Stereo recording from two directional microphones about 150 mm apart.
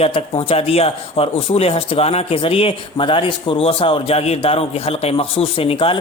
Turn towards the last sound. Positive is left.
turn(degrees=35)  # may be behind; listen again after turning